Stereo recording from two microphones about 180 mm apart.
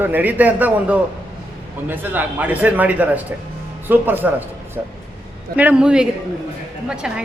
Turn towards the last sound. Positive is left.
turn(degrees=-5)  # may be behind; listen again after turning